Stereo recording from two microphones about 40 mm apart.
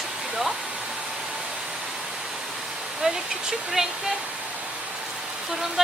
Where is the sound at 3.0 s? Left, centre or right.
Right.